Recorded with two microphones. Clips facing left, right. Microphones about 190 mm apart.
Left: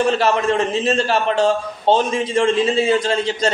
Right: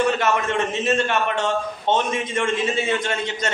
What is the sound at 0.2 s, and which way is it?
A man's voice, 30° left (ahead or behind).